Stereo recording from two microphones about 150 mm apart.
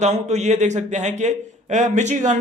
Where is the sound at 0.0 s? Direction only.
50° right (ahead or behind).